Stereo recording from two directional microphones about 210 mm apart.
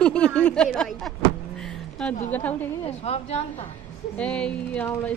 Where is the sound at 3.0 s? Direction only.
30° left (ahead or behind).